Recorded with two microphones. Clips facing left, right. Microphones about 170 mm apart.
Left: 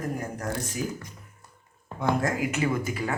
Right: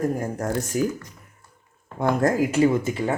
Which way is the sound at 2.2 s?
45° right (ahead or behind).